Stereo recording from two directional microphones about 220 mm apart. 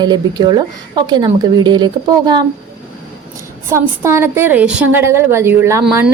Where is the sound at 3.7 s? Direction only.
10° right (ahead or behind).